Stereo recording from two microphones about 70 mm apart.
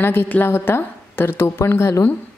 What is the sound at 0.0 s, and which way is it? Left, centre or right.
A woman's voice, left.